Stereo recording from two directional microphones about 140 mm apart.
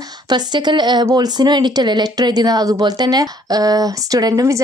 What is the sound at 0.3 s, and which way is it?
Speech, 30° right (ahead or behind).